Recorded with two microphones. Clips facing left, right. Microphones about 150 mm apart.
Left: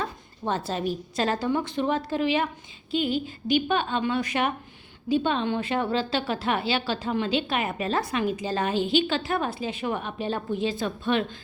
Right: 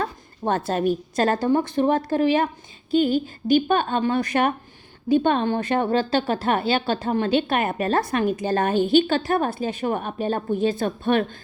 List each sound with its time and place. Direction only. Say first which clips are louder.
0.0 s speech: right 5 dB; 55° right (ahead or behind)